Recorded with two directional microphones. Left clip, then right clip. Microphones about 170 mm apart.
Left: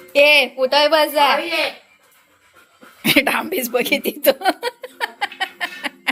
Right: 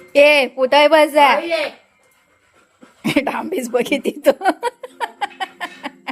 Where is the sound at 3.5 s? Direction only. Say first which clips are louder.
Even; 30° right (ahead or behind).